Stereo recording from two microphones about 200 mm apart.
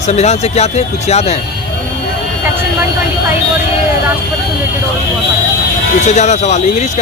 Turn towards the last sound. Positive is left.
turn(degrees=35)  # may be behind; listen again after turning